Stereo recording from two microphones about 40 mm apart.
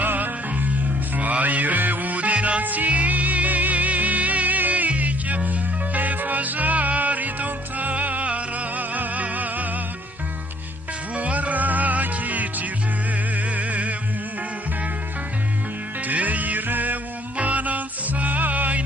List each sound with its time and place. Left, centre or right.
0.0 s music: right
11.1 s music: right
16.0 s music: right
17.3 s music: right